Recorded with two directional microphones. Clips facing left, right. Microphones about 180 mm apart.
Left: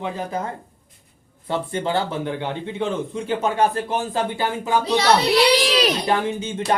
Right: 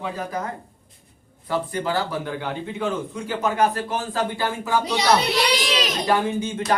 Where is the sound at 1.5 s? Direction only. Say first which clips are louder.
Left 1 dB; 25° left (ahead or behind).